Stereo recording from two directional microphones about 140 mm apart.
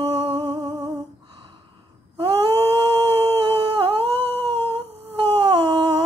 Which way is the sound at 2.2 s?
25° right (ahead or behind).